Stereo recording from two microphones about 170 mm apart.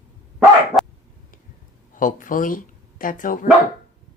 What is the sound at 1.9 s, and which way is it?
Speech, 50° left (ahead or behind).